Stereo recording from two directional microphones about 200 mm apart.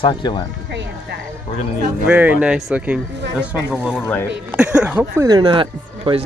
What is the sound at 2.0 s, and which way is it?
Speech, 10° right (ahead or behind).